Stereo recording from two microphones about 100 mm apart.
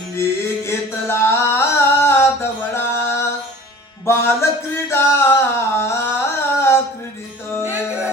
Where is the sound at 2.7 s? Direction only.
25° left (ahead or behind).